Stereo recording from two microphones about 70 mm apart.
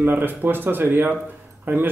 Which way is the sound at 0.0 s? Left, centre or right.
Right.